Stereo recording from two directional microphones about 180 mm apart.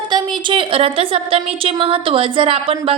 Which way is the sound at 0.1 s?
25° right (ahead or behind).